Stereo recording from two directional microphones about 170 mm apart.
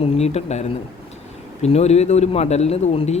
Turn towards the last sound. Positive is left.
turn(degrees=40)  # may be behind; listen again after turning